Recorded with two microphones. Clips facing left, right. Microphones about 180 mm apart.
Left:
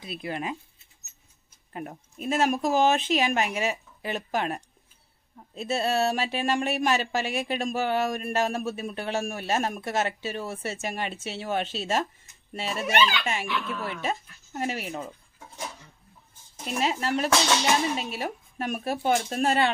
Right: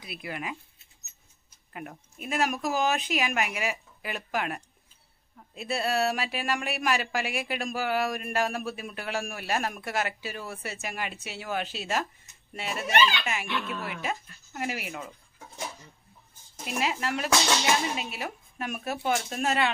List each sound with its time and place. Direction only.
0.0 s speech: 25° left (ahead or behind)
1.7 s speech: 30° left (ahead or behind)
16.8 s speech: 30° left (ahead or behind)